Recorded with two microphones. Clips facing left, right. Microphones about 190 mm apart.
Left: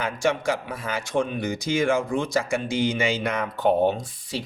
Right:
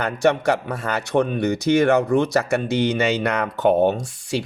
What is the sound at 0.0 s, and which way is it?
Speech, 60° right (ahead or behind).